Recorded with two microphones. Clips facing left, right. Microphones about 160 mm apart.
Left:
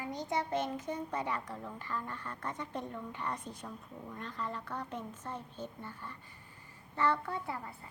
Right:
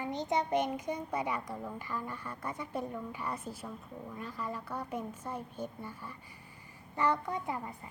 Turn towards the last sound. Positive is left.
turn(degrees=-15)  # may be behind; listen again after turning